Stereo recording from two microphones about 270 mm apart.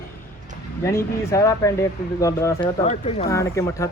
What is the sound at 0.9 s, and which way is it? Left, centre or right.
Speech, centre.